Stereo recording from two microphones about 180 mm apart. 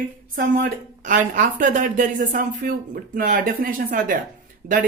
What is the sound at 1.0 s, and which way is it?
Speech, 45° right (ahead or behind).